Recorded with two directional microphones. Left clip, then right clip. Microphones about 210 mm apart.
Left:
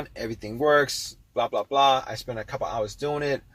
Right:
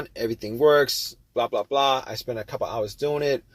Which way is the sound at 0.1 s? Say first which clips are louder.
Right 5 dB; 30° right (ahead or behind).